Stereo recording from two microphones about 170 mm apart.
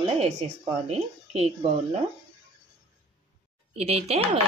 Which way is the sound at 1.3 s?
40° right (ahead or behind).